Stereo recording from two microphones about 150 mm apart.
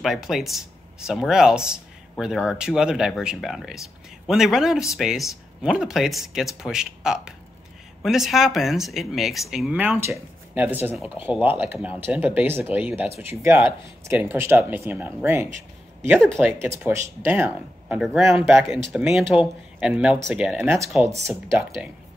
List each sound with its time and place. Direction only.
0.0 s speech: centre (ahead or behind)
16.2 s speech: 5° left (ahead or behind)
16.5 s speech: 20° right (ahead or behind)